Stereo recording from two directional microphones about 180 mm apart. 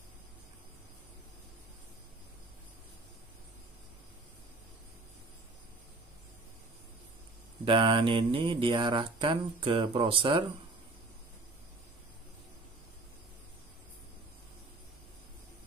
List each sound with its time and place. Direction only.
7.6 s speech: 25° right (ahead or behind)